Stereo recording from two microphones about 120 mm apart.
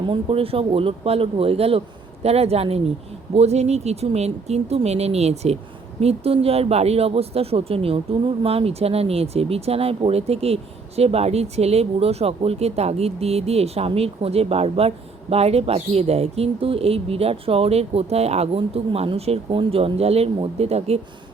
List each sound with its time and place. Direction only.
0.0 s speech: 45° right (ahead or behind)